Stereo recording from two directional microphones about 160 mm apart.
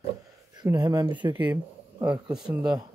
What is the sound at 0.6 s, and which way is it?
Speech, 25° right (ahead or behind).